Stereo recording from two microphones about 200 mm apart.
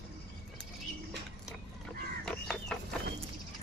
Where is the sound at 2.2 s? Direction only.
5° left (ahead or behind).